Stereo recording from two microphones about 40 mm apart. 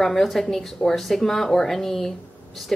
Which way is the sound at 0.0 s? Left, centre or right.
Centre.